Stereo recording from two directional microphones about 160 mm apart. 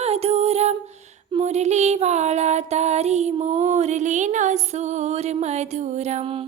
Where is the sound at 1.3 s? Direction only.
45° right (ahead or behind).